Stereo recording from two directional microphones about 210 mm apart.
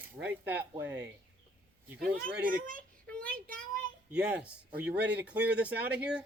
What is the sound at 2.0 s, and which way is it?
Speech, 45° right (ahead or behind).